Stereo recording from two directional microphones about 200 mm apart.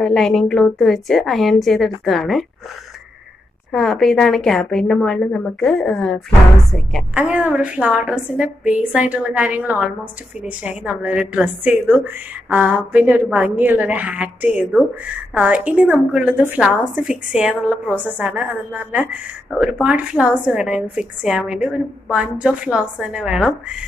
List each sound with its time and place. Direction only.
0.0 s a woman's voice: centre (ahead or behind)
3.7 s a woman's voice: centre (ahead or behind)